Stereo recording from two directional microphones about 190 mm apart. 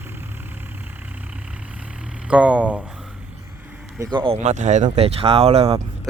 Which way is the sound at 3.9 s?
15° right (ahead or behind).